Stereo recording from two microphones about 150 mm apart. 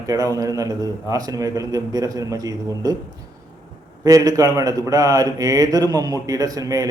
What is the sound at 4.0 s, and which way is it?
A man's voice, 25° right (ahead or behind).